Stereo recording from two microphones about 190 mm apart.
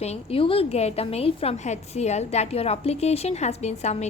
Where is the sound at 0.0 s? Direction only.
30° left (ahead or behind).